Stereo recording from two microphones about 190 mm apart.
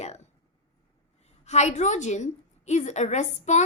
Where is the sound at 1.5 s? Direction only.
35° left (ahead or behind).